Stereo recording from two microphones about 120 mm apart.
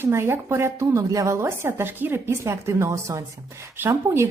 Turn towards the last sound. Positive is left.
turn(degrees=-20)  # may be behind; listen again after turning